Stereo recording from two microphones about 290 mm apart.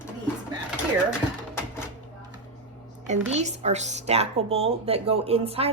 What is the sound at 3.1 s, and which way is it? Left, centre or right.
Speech, right.